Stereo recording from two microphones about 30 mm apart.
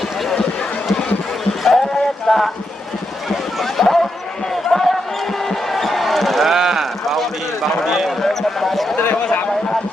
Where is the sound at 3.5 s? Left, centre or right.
Centre.